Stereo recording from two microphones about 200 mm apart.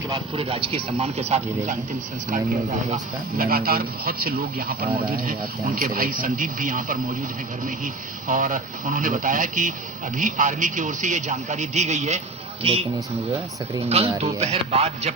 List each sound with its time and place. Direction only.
0.1 s a man's voice: 30° right (ahead or behind)
8.3 s speech: 40° right (ahead or behind)
13.8 s speech: 30° right (ahead or behind)